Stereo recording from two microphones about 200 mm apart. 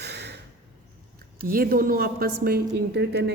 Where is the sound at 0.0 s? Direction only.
55° right (ahead or behind).